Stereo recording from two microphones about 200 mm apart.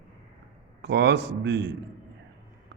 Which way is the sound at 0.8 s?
60° right (ahead or behind).